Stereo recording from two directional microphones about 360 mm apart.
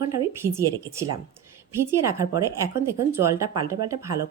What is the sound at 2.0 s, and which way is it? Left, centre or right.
A woman's voice, centre.